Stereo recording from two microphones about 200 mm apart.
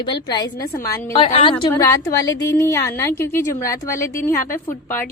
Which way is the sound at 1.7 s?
15° left (ahead or behind).